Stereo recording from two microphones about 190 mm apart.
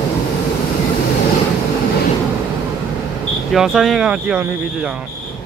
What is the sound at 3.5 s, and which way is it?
Speech, centre (ahead or behind).